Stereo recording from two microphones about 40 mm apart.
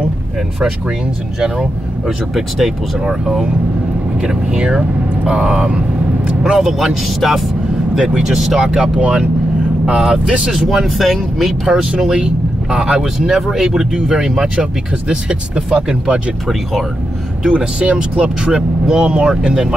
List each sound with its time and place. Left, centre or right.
0.6 s speech: centre
1.4 s speech: centre
4.2 s speech: right
6.2 s vehicle: centre
6.6 s speech: centre
7.9 s speech: centre
13.2 s speech: centre
17.4 s speech: right